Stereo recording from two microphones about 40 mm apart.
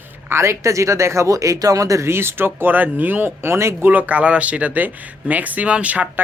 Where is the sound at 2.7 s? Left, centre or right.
Right.